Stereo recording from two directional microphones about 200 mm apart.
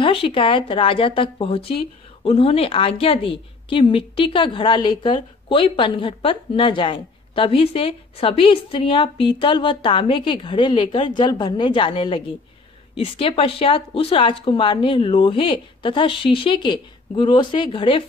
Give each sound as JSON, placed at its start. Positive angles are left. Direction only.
{"t": 0.0, "sound": "speech", "side_deg": 25}